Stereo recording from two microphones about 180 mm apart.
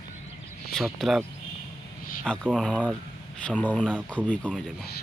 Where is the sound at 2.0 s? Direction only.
50° left (ahead or behind).